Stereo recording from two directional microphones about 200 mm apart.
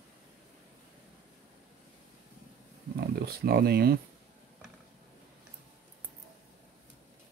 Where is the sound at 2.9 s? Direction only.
50° right (ahead or behind).